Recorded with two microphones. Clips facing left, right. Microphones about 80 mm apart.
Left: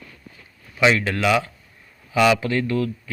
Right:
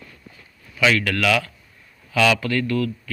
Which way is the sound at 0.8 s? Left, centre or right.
Left.